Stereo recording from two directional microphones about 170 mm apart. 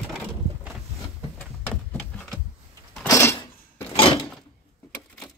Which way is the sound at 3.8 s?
30° left (ahead or behind).